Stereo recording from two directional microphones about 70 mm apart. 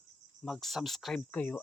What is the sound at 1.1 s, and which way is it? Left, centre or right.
Speech, left.